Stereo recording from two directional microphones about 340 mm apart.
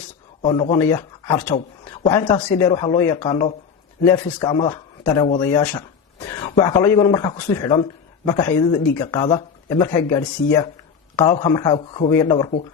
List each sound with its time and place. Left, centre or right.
0.4 s speech: centre